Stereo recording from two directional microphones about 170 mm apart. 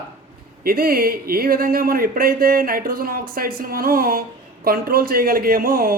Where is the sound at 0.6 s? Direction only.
60° right (ahead or behind).